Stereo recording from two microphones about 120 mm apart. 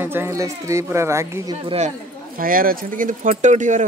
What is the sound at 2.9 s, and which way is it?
Speech, 90° right.